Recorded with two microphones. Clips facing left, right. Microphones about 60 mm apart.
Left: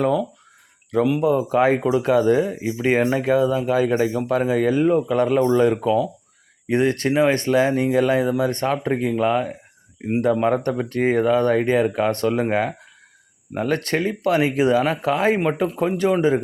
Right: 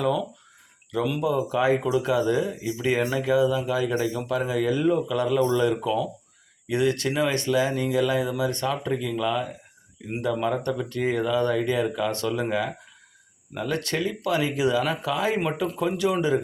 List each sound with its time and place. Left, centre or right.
1.2 s speech: left
15.6 s speech: left